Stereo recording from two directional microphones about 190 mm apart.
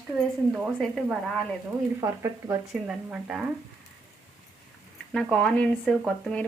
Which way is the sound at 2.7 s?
5° right (ahead or behind).